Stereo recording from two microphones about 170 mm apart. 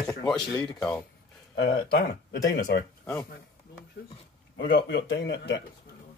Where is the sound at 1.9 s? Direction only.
70° left (ahead or behind).